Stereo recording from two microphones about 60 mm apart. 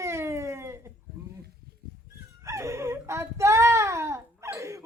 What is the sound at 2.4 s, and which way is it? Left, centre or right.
Whimper, right.